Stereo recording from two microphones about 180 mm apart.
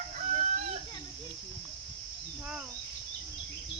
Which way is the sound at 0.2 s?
40° right (ahead or behind).